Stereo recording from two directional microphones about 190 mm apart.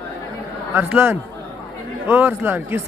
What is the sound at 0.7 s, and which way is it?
Speech, 10° right (ahead or behind).